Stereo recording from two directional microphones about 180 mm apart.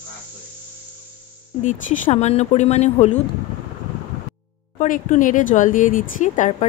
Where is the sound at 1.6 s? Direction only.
45° left (ahead or behind).